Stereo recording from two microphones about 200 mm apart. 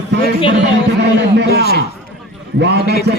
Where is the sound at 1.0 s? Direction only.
60° right (ahead or behind).